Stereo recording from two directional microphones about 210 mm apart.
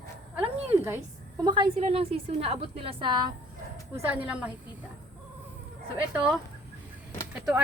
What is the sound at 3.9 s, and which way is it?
Speech, 5° right (ahead or behind).